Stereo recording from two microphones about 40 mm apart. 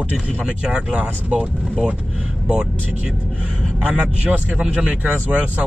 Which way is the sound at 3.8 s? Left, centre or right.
Right.